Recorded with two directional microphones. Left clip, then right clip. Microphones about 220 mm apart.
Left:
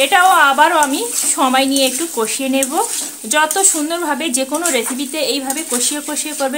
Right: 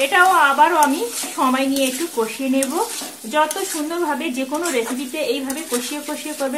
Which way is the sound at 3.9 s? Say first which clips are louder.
Left 4 dB; 50° left (ahead or behind).